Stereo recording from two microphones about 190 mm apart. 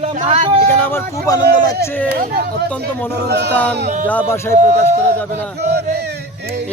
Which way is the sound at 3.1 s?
60° right (ahead or behind).